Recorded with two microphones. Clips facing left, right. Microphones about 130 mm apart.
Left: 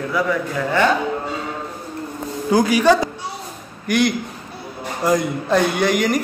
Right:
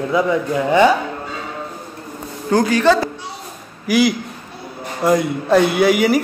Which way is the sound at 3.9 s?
5° right (ahead or behind).